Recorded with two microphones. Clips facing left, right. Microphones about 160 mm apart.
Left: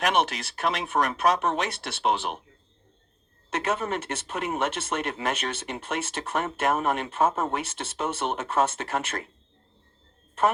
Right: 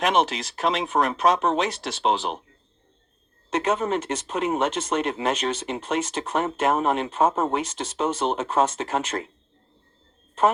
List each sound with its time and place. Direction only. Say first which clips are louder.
0.1 s speech: right 3 dB; 35° right (ahead or behind)
3.5 s speech: right 4 dB; 35° right (ahead or behind)